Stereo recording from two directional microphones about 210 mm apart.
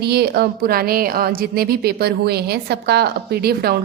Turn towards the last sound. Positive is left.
turn(degrees=-50)  # may be behind; listen again after turning